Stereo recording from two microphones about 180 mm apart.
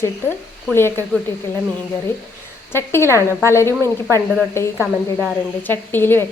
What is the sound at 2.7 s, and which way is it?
Speech, 15° left (ahead or behind).